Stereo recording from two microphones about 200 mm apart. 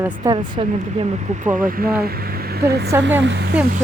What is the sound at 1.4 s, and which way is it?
Speech, 45° right (ahead or behind).